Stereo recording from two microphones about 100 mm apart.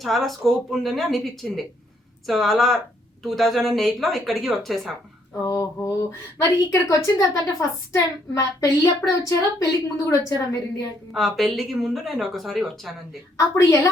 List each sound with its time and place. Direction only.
0.0 s speech: centre (ahead or behind)
5.4 s a woman's voice: 30° left (ahead or behind)
11.1 s speech: centre (ahead or behind)
13.3 s a woman's voice: 30° left (ahead or behind)